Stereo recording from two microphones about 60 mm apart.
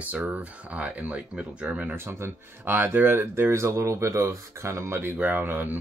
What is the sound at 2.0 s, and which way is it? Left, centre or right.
Speech, right.